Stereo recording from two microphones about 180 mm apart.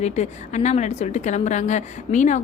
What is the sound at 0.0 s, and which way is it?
A woman's voice, 40° left (ahead or behind).